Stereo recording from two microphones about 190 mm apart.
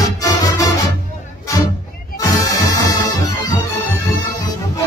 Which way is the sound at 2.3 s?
20° left (ahead or behind).